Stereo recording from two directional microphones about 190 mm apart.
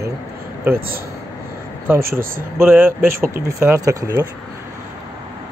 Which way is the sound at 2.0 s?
50° right (ahead or behind).